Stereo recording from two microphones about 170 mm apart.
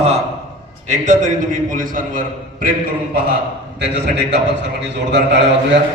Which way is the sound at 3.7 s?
90° right.